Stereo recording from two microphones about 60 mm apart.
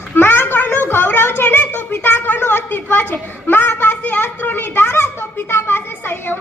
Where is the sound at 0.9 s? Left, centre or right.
Left.